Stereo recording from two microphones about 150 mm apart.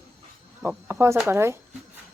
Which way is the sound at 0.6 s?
15° right (ahead or behind).